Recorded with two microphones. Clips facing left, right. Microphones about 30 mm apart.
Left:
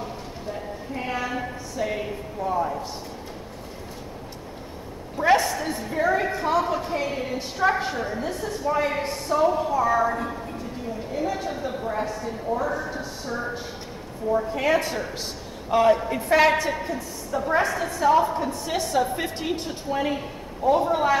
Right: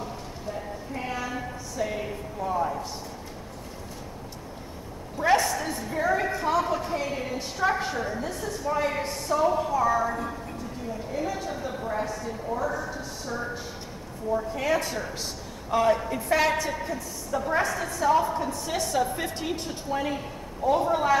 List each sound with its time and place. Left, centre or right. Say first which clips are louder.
0.0 s a sound: left 2 dB; left
2.4 s speech: left 2 dB; centre
5.1 s a woman's voice: left 3 dB; left